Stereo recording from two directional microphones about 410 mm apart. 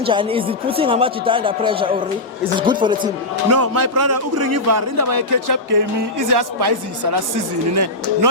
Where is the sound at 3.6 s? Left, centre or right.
Right.